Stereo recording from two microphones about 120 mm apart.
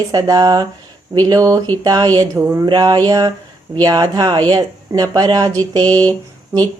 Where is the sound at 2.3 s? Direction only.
15° right (ahead or behind).